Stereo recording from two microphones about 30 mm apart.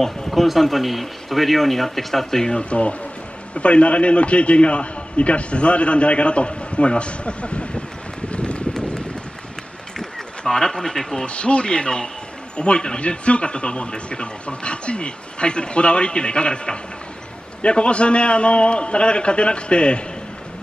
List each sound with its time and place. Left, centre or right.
0.3 s speech: centre
2.7 s a man's voice: left
8.3 s run: left
9.9 s a sound: left
11.2 s a man's voice: left